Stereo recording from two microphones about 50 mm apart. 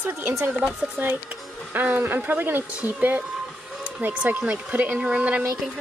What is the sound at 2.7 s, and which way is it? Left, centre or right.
Speech, right.